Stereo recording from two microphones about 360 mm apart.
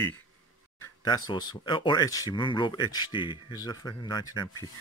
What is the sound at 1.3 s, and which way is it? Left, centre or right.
Speech, centre.